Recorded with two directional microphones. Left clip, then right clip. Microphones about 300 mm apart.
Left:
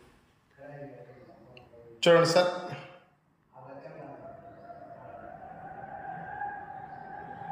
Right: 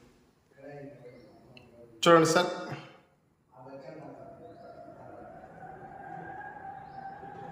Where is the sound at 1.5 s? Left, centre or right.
Centre.